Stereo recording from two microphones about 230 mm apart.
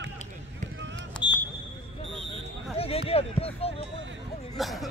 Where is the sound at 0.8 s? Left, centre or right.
Right.